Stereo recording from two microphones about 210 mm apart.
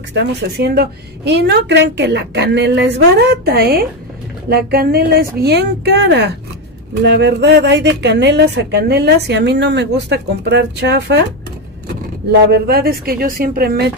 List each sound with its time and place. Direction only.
0.1 s speech: 50° right (ahead or behind)
12.6 s speech: 45° right (ahead or behind)